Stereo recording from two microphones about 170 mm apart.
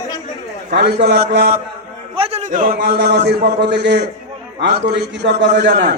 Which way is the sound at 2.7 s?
80° right.